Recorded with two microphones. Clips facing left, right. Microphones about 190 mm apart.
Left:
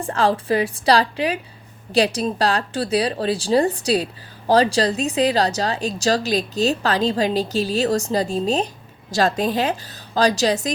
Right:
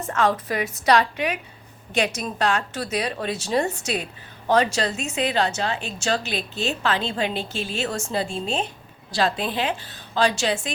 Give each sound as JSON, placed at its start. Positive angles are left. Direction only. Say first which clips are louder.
{"t": 0.0, "sound": "speech", "louder": "left 2 dB", "side_deg": 30}